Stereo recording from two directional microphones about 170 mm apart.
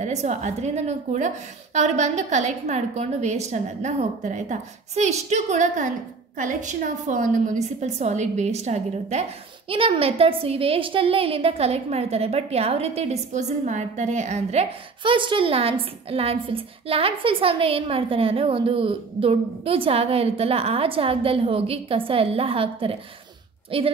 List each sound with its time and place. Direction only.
0.0 s a woman's voice: 40° right (ahead or behind)